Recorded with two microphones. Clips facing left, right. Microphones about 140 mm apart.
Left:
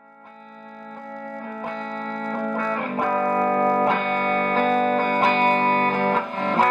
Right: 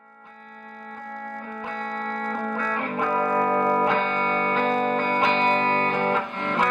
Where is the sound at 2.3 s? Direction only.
30° left (ahead or behind).